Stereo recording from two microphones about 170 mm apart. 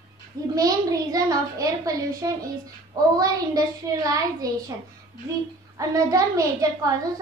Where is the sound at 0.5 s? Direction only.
20° right (ahead or behind).